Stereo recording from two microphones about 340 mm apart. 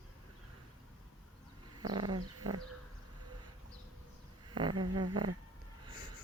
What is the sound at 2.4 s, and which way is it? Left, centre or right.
Speech, right.